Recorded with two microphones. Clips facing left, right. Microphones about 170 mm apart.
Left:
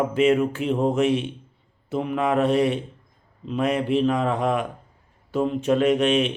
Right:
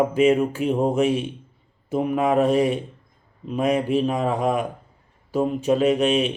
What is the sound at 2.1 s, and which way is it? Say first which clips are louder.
Speech: right 2 dB; 10° right (ahead or behind).